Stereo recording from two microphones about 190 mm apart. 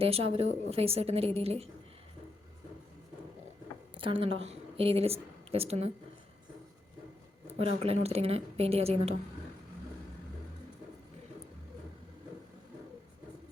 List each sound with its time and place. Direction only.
0.0 s speech: 30° right (ahead or behind)
3.9 s speech: 30° right (ahead or behind)
7.4 s speech: 30° right (ahead or behind)